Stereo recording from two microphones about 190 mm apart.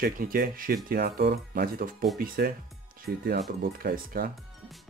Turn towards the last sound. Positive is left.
turn(degrees=-50)  # may be behind; listen again after turning